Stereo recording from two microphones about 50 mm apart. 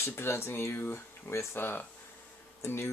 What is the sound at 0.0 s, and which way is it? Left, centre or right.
Speech, left.